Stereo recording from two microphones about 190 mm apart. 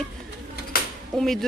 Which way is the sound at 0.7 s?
50° left (ahead or behind).